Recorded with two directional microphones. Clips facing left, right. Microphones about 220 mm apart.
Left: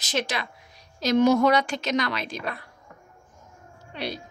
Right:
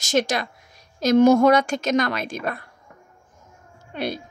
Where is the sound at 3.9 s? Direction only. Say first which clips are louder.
Right 5 dB; 50° right (ahead or behind).